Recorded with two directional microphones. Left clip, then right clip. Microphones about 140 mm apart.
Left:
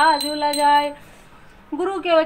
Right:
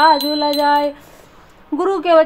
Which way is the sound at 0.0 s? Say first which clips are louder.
Right 4 dB; 45° right (ahead or behind).